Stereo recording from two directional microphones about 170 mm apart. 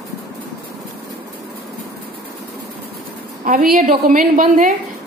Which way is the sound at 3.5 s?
55° right (ahead or behind).